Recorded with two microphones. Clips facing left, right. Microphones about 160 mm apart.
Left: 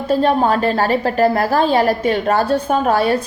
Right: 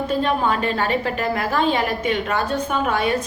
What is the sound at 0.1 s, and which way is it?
A woman's voice, 35° left (ahead or behind).